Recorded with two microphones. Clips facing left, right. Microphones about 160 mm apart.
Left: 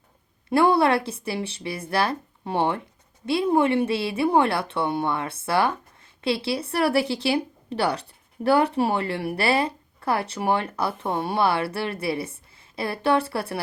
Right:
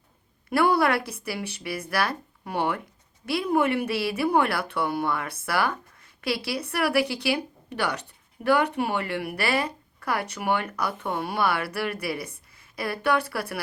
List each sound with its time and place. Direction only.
0.5 s speech: 25° left (ahead or behind)